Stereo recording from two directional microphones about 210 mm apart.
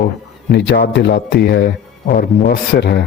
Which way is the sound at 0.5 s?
55° left (ahead or behind).